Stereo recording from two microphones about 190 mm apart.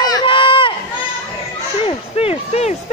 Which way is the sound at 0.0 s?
25° left (ahead or behind).